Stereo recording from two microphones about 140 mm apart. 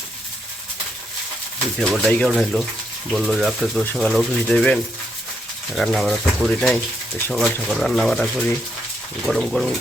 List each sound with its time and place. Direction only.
1.8 s speech: 5° left (ahead or behind)